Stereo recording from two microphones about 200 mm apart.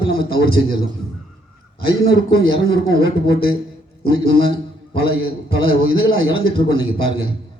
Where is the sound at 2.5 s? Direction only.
75° right (ahead or behind).